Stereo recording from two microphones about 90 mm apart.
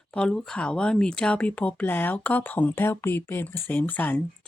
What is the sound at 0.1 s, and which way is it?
Speech, 10° left (ahead or behind).